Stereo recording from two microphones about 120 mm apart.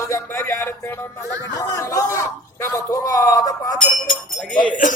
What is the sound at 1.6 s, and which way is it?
Chatter, 25° left (ahead or behind).